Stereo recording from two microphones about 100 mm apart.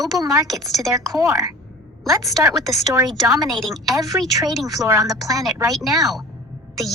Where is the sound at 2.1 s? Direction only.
35° right (ahead or behind).